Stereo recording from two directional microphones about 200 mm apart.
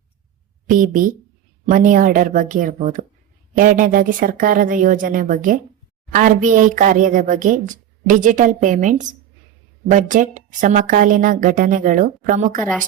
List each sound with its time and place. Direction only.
0.7 s a woman's voice: 40° right (ahead or behind)